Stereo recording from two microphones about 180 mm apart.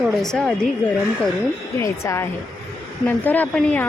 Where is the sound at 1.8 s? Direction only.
15° left (ahead or behind).